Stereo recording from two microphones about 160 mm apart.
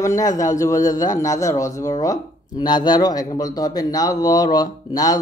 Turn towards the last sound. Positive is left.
turn(degrees=25)  # may be behind; listen again after turning